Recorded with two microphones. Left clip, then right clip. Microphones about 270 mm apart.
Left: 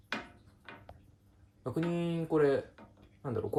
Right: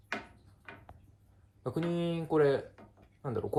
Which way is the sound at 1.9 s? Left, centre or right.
Centre.